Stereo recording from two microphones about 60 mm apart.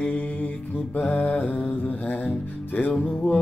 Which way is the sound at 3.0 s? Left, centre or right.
Centre.